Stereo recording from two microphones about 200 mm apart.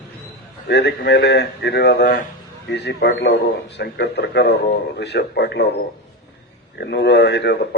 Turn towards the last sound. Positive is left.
turn(degrees=60)  # may be behind; listen again after turning